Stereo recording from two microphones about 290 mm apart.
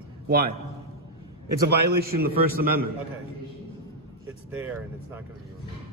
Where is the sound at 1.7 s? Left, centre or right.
Right.